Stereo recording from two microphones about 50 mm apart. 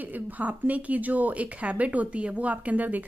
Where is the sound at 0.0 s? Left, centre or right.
Right.